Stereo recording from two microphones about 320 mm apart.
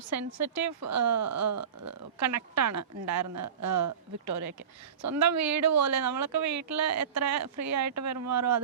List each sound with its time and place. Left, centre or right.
0.3 s speech: right